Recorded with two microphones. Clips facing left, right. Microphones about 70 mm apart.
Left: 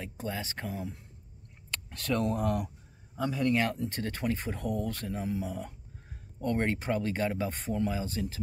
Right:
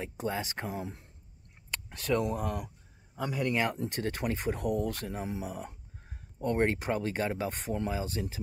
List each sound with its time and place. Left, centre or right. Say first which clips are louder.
0.0 s speech: right 3 dB; right
1.7 s speech: right 2 dB; centre
3.2 s speech: left 2 dB; centre